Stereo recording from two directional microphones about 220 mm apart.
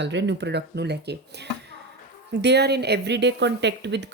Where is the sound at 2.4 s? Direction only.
50° right (ahead or behind).